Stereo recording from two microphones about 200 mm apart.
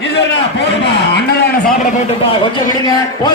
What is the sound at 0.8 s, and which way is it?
Speech, 55° left (ahead or behind).